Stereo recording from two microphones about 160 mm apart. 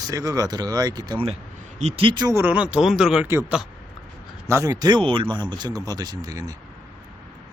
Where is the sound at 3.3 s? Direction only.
15° right (ahead or behind).